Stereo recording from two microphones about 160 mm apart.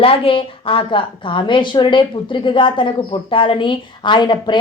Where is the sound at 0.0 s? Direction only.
35° left (ahead or behind).